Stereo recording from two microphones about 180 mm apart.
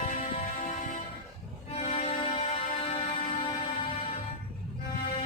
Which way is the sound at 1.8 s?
35° left (ahead or behind).